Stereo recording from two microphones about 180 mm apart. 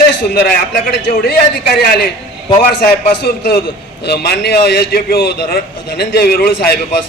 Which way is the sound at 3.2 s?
60° left (ahead or behind).